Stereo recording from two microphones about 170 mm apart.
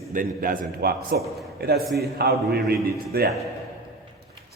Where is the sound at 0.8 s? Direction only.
65° right (ahead or behind).